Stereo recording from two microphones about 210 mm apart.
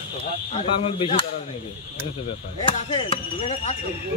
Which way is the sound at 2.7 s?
25° left (ahead or behind).